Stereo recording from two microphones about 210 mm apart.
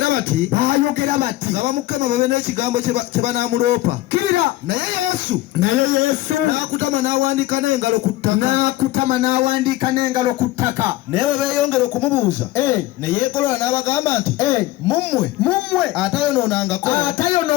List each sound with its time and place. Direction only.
0.0 s speech: 45° right (ahead or behind); by 15.5 s 15° left (ahead or behind)
15.7 s speech: centre (ahead or behind); by 17.5 s 20° left (ahead or behind)